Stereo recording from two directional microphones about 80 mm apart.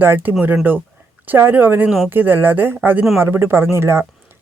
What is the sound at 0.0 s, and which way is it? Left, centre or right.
Speech, right.